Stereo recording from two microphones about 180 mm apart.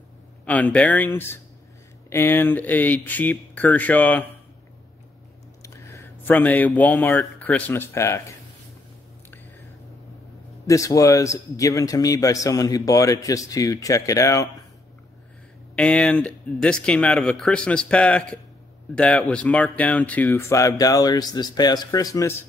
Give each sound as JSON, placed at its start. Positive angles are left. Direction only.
{"t": 0.5, "sound": "speech", "side_deg": 5}
{"t": 5.6, "sound": "speech", "side_deg": 15}
{"t": 10.7, "sound": "a man's voice", "side_deg": 20}
{"t": 15.7, "sound": "speech", "side_deg": 5}